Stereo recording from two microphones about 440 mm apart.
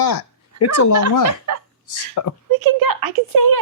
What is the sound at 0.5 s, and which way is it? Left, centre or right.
Speech, left.